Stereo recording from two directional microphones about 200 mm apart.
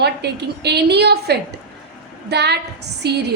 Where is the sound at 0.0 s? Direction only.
55° right (ahead or behind).